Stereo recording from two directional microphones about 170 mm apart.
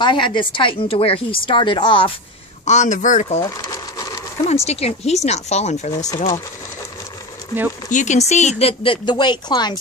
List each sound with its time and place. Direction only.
0.0 s a woman's voice: 30° left (ahead or behind)
2.6 s speech: 45° left (ahead or behind)
3.4 s a sound: 20° left (ahead or behind)
4.5 s speech: 40° left (ahead or behind)
7.9 s speech: 45° left (ahead or behind); by 9.8 s 25° left (ahead or behind)